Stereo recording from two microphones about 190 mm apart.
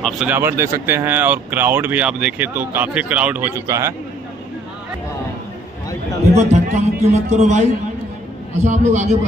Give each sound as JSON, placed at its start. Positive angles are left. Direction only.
{"t": 0.0, "sound": "speech", "side_deg": -5}
{"t": 6.3, "sound": "a man's voice", "side_deg": -35}
{"t": 8.6, "sound": "a man's voice", "side_deg": -40}